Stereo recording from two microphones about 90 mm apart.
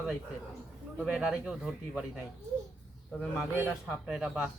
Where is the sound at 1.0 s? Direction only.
10° right (ahead or behind).